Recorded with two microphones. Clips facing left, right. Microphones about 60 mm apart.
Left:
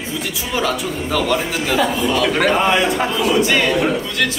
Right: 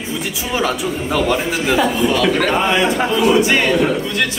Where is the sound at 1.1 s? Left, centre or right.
Centre.